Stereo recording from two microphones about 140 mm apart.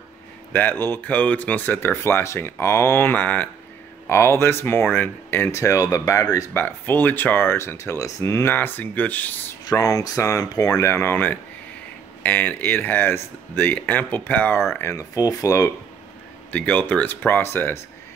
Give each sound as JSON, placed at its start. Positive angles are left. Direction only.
{"t": 0.5, "sound": "speech", "side_deg": 15}
{"t": 6.6, "sound": "speech", "side_deg": 15}
{"t": 9.7, "sound": "speech", "side_deg": 25}
{"t": 16.5, "sound": "speech", "side_deg": 10}